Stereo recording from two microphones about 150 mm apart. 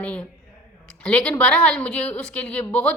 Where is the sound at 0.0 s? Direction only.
10° left (ahead or behind).